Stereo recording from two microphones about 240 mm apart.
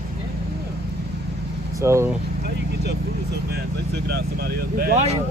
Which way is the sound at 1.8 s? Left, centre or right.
Centre.